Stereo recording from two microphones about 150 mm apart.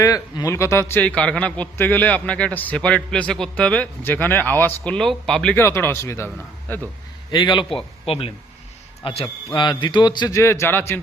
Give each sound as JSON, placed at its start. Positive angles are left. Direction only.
{"t": 0.0, "sound": "a man's voice", "side_deg": 20}
{"t": 7.3, "sound": "a man's voice", "side_deg": 30}
{"t": 9.0, "sound": "a man's voice", "side_deg": 30}
{"t": 10.3, "sound": "a man's voice", "side_deg": 15}